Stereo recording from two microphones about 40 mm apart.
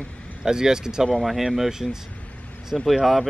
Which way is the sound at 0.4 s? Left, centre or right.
Centre.